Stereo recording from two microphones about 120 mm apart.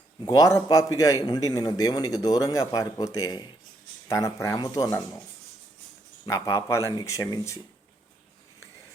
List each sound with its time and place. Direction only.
0.3 s a man's voice: 25° left (ahead or behind)
6.2 s a man's voice: 25° left (ahead or behind)